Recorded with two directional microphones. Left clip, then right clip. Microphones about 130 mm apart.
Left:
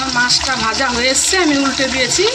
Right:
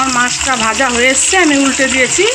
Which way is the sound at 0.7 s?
30° right (ahead or behind).